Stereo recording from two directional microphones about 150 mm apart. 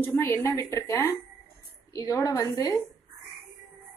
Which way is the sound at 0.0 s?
15° left (ahead or behind).